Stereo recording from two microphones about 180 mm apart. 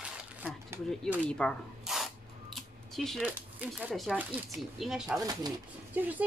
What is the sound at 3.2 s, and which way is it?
Speech, 10° right (ahead or behind).